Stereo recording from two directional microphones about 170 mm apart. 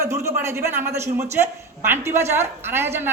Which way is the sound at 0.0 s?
15° right (ahead or behind).